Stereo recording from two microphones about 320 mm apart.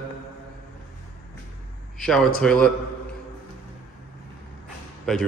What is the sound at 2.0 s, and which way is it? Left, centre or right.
Speech, centre.